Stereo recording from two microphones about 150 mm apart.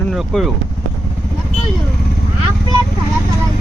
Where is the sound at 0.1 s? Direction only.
Centre (ahead or behind).